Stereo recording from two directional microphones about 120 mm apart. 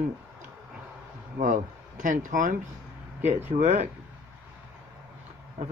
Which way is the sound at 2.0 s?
90° right.